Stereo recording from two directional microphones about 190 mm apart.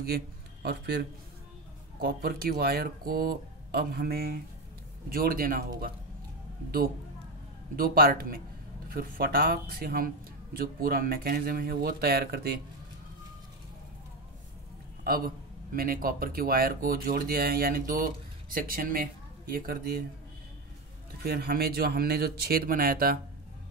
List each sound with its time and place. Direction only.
0.0 s a man's voice: 55° right (ahead or behind)
7.7 s a man's voice: 50° right (ahead or behind)
15.0 s a man's voice: 50° right (ahead or behind)
21.2 s a man's voice: 55° right (ahead or behind)